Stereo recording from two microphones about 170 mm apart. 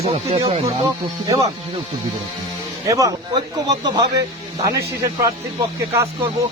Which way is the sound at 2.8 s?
20° right (ahead or behind).